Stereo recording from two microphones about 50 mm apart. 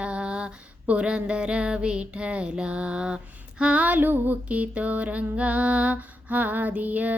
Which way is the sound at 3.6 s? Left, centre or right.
Right.